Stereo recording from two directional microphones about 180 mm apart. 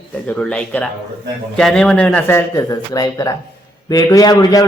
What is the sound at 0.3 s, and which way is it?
A man's voice, 5° left (ahead or behind).